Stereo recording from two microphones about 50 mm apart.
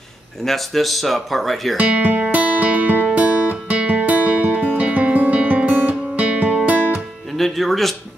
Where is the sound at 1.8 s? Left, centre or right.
Right.